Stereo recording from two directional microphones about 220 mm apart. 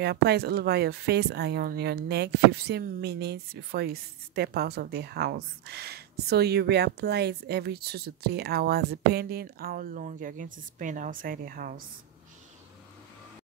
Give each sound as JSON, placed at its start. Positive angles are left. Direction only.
{"t": 0.0, "sound": "speech", "side_deg": -50}